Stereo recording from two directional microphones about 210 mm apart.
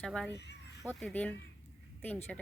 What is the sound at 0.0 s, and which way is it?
Speech, centre (ahead or behind).